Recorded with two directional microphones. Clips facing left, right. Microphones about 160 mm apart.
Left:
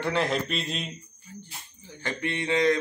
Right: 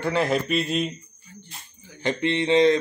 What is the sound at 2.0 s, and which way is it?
Mantra, 20° right (ahead or behind).